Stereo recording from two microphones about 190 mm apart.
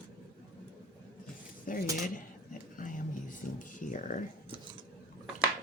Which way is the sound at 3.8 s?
45° left (ahead or behind).